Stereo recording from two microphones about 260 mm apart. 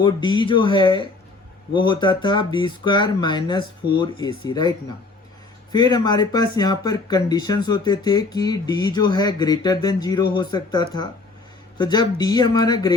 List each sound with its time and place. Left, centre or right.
0.0 s speech: centre
5.7 s speech: centre